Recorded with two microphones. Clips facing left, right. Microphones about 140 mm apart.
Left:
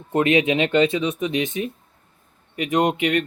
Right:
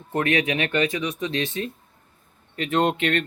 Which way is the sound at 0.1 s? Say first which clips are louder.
Left 5 dB; 20° left (ahead or behind).